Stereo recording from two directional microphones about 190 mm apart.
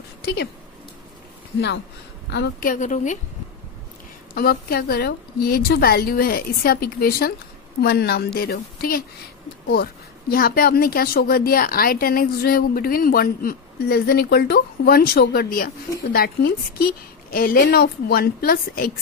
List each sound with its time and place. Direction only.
0.2 s speech: 60° left (ahead or behind)
2.2 s speech: 65° left (ahead or behind)
2.7 s a woman's voice: 40° left (ahead or behind)
4.3 s speech: 50° left (ahead or behind)
10.3 s speech: 50° left (ahead or behind)